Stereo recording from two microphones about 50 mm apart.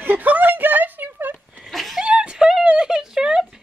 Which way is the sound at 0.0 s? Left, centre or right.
Right.